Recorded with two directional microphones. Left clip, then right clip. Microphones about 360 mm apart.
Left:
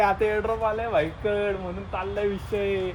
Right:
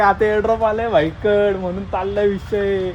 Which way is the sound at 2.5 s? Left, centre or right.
Right.